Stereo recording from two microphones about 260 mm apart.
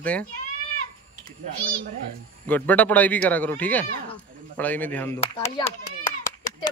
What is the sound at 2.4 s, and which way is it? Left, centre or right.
Speech, centre.